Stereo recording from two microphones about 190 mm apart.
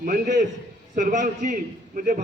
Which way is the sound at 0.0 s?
45° right (ahead or behind).